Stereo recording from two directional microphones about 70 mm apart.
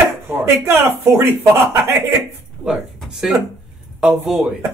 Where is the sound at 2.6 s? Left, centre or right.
Centre.